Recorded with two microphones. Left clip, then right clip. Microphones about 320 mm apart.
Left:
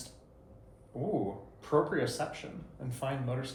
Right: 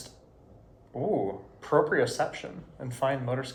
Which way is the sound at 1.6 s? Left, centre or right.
Right.